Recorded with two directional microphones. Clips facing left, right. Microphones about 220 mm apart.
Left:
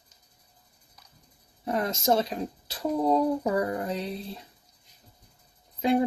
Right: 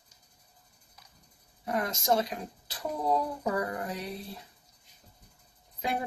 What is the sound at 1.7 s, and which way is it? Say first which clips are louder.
Speech: left 3 dB; 30° left (ahead or behind).